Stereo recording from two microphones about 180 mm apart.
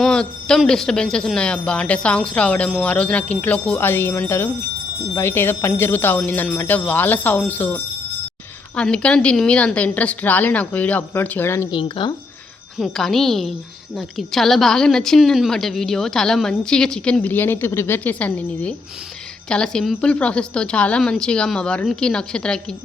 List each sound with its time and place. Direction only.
0.0 s a woman's voice: 5° left (ahead or behind)
11.8 s speech: 30° left (ahead or behind)
12.8 s a woman's voice: centre (ahead or behind)